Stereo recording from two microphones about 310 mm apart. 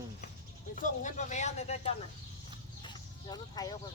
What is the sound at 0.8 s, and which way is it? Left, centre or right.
Speech, left.